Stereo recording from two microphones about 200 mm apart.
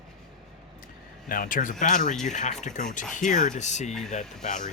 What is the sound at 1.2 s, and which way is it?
Speech, 45° left (ahead or behind).